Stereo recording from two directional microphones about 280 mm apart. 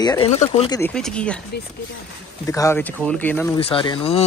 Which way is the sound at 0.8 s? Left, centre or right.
Centre.